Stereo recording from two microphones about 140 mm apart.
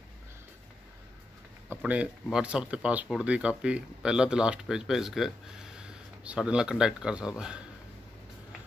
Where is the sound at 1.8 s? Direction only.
10° right (ahead or behind).